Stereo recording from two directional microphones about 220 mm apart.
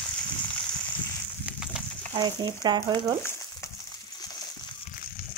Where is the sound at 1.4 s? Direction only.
Centre (ahead or behind).